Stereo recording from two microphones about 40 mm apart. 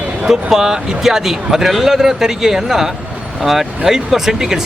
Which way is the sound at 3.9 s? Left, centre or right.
Centre.